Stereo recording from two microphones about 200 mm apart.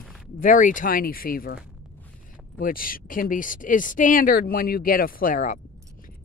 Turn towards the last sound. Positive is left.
turn(degrees=40)  # may be behind; listen again after turning